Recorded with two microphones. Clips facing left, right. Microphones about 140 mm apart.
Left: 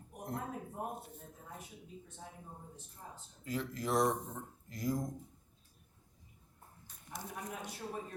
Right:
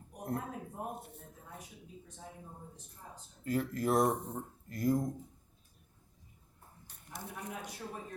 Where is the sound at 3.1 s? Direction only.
50° right (ahead or behind).